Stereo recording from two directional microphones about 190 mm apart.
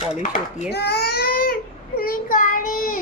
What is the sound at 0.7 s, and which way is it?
Child singing, 60° left (ahead or behind).